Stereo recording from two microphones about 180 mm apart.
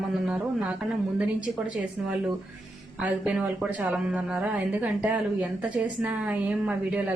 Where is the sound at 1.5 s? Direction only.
5° right (ahead or behind).